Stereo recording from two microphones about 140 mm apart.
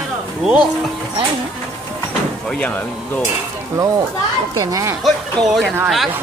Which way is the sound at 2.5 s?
10° left (ahead or behind).